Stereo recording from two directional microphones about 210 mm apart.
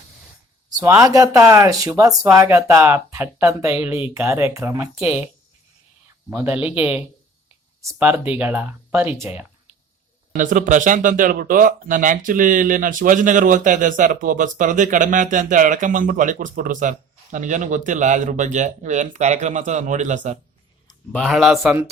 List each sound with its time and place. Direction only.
0.7 s speech: 15° right (ahead or behind)
6.3 s speech: 10° right (ahead or behind)
10.3 s speech: 40° right (ahead or behind)
21.1 s a man's voice: centre (ahead or behind)